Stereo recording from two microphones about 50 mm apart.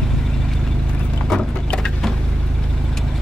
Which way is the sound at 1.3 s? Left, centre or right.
Centre.